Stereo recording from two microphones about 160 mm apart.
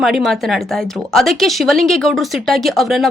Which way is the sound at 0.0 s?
Centre (ahead or behind).